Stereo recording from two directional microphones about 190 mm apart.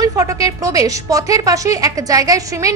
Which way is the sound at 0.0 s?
20° right (ahead or behind).